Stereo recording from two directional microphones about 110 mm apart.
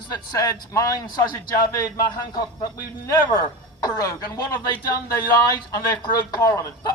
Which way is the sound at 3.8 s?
35° left (ahead or behind).